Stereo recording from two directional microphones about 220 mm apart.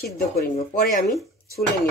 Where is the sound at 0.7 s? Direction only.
40° left (ahead or behind).